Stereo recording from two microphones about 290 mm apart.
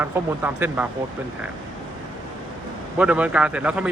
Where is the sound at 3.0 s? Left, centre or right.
Centre.